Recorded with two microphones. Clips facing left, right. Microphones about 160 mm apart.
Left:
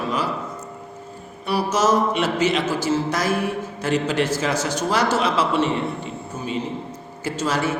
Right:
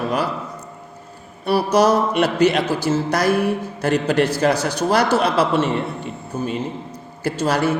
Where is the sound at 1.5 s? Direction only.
65° right (ahead or behind).